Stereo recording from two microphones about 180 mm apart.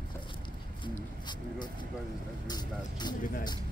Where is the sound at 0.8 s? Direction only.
25° left (ahead or behind).